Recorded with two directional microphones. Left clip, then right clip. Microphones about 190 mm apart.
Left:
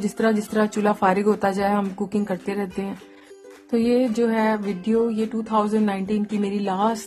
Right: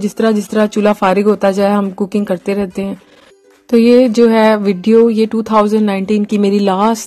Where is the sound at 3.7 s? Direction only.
35° right (ahead or behind).